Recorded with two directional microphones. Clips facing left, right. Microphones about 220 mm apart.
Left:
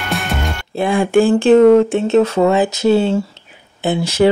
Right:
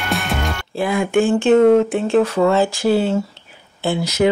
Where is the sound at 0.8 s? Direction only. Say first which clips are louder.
Left 4 dB; 30° left (ahead or behind).